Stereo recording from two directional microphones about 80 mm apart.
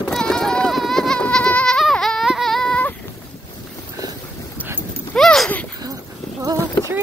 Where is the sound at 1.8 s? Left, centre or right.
Centre.